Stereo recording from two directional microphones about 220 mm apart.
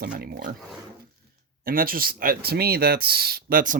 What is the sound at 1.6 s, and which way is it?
Speech, 40° right (ahead or behind).